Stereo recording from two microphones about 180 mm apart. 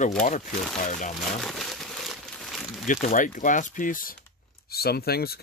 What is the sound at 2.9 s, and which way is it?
Speech, 45° left (ahead or behind).